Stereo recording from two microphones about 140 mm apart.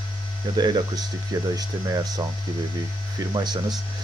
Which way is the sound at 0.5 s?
30° right (ahead or behind).